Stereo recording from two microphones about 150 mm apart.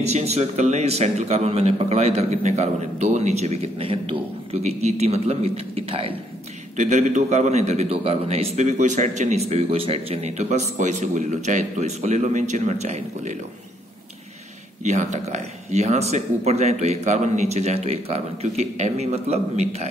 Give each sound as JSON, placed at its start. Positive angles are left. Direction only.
{"t": 0.0, "sound": "a man's voice", "side_deg": -45}
{"t": 6.8, "sound": "a man's voice", "side_deg": -50}
{"t": 14.8, "sound": "a man's voice", "side_deg": -50}